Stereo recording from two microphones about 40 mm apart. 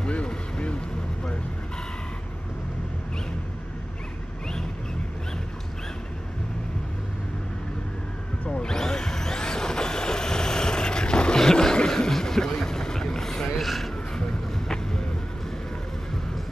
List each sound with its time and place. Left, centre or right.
0.0 s vehicle: left
8.5 s vehicle: left
13.7 s a sound: centre